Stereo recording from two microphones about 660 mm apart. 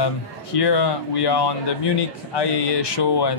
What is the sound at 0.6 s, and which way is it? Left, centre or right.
Speech, left.